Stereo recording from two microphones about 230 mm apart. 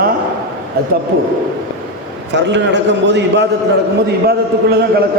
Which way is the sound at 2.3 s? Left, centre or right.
Right.